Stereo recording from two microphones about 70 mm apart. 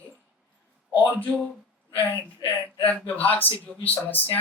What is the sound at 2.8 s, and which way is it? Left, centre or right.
Speech, left.